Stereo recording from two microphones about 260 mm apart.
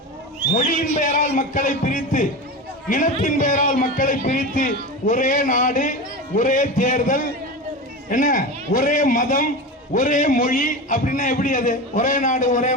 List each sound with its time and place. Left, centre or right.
0.5 s a man's voice: left